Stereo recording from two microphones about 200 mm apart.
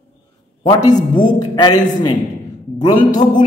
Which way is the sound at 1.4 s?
20° left (ahead or behind).